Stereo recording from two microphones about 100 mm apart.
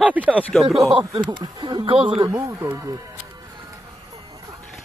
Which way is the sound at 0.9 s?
50° right (ahead or behind).